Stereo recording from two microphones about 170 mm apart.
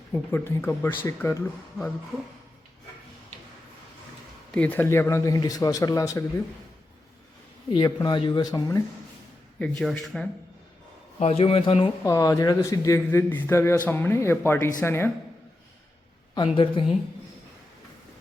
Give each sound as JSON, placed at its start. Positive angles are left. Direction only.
{"t": 0.1, "sound": "a man's voice", "side_deg": 10}
{"t": 4.5, "sound": "a man's voice", "side_deg": 10}
{"t": 7.7, "sound": "a man's voice", "side_deg": 25}
{"t": 9.6, "sound": "speech", "side_deg": 5}
{"t": 11.2, "sound": "a man's voice", "side_deg": 40}
{"t": 12.0, "sound": "a man's voice", "side_deg": 20}
{"t": 16.3, "sound": "a man's voice", "side_deg": 30}